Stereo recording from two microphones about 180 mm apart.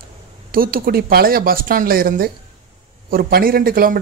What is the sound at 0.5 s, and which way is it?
Speech, 55° right (ahead or behind).